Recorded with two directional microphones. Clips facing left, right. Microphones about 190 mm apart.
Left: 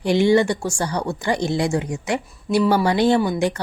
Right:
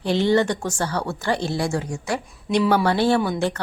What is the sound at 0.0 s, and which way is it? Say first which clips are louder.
A woman's voice: left 3 dB; 15° left (ahead or behind).